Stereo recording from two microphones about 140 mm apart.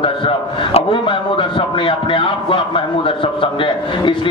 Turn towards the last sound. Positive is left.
turn(degrees=40)  # may be behind; listen again after turning